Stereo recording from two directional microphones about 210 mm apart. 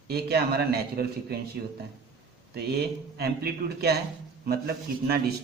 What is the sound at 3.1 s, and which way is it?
Speech, 50° right (ahead or behind).